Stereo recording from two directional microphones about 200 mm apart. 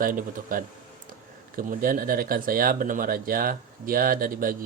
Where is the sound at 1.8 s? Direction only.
45° right (ahead or behind).